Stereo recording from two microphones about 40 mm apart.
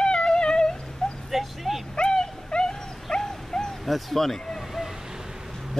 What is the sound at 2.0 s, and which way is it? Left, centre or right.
Dog, left.